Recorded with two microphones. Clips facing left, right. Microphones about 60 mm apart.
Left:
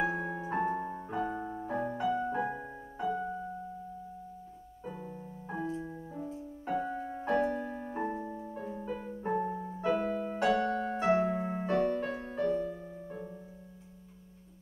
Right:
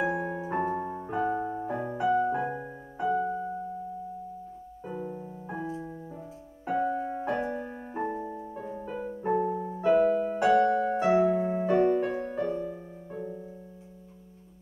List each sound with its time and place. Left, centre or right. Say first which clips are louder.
0.0 s piano: right 3 dB; centre
4.8 s music: right 6 dB; centre
11.2 s music: right 7 dB; centre